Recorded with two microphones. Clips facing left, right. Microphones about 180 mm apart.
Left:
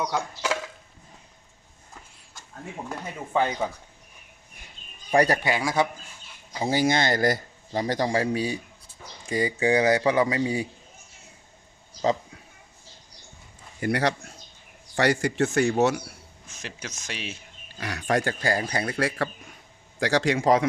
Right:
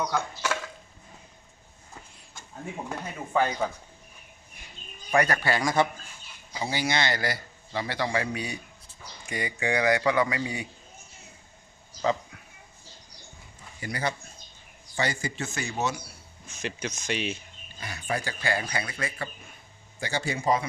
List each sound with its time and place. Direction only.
0.0 s a man's voice: 15° left (ahead or behind)
3.3 s speech: 20° left (ahead or behind)
5.1 s a man's voice: 35° left (ahead or behind)
5.4 s a man's voice: 10° left (ahead or behind)
6.6 s a man's voice: 45° left (ahead or behind)
13.7 s speech: 55° left (ahead or behind)
14.0 s a man's voice: 90° left
14.9 s speech: 75° left (ahead or behind)
16.5 s speech: centre (ahead or behind)
17.7 s speech: 90° left; by 18.3 s 70° left (ahead or behind)
18.4 s a man's voice: 40° left (ahead or behind)
18.9 s a man's voice: 85° left